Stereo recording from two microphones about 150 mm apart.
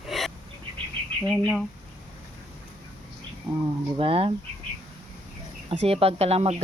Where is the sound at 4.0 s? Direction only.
40° right (ahead or behind).